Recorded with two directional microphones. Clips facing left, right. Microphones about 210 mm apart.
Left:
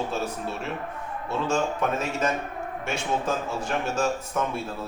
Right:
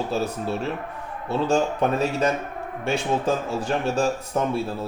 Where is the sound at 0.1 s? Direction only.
35° right (ahead or behind).